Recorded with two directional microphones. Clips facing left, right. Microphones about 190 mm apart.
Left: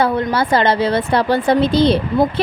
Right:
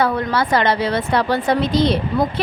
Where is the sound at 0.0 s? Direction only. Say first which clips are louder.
Left 2 dB; 25° left (ahead or behind).